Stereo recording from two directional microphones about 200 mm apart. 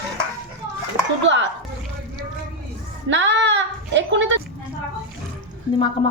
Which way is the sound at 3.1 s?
65° right (ahead or behind).